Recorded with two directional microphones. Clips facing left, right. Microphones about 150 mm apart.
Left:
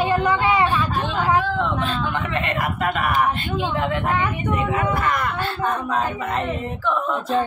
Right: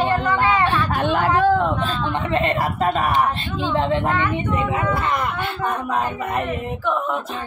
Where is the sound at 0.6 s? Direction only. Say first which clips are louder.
Right 2 dB; 65° right (ahead or behind).